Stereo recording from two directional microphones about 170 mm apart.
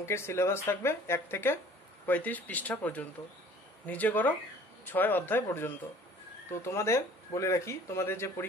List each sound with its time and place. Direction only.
0.0 s speech: 15° left (ahead or behind)